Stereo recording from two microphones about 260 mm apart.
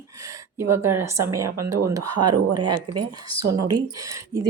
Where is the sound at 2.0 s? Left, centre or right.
Right.